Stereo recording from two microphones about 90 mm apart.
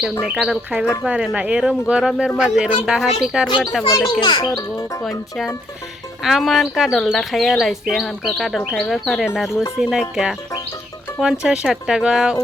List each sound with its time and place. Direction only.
0.2 s speech: 5° right (ahead or behind)
4.2 s a child's voice: 65° left (ahead or behind)
4.4 s speech: 40° left (ahead or behind)
6.2 s speech: 5° right (ahead or behind)